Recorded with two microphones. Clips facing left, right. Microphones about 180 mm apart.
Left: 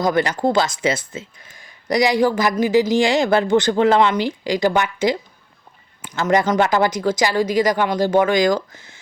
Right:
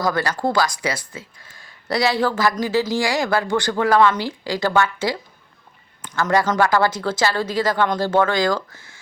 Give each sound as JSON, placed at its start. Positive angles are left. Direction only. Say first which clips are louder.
{"t": 0.0, "sound": "speech", "louder": "left 3 dB", "side_deg": 20}
{"t": 6.0, "sound": "a sound", "louder": "right 1 dB", "side_deg": 15}
{"t": 6.2, "sound": "speech", "louder": "left 2 dB", "side_deg": 15}